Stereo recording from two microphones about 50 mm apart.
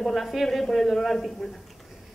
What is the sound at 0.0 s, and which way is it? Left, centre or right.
A woman's voice, centre.